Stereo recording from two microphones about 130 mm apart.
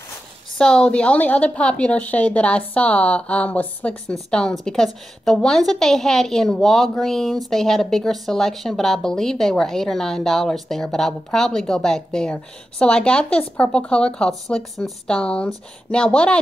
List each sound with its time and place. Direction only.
0.6 s a woman's voice: 5° left (ahead or behind)